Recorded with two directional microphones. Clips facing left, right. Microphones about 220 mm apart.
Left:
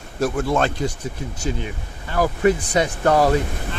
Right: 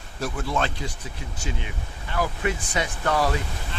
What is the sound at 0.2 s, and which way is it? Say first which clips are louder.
Speech: left 7 dB; 45° left (ahead or behind).